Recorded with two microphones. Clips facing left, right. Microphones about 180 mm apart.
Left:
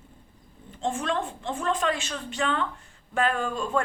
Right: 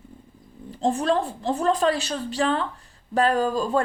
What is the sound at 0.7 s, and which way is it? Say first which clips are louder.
A woman's voice: right 6 dB; 35° right (ahead or behind).